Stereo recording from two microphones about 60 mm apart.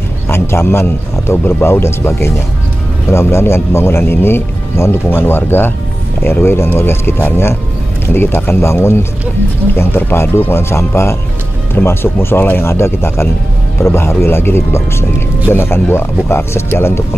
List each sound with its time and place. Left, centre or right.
0.3 s a man's voice: left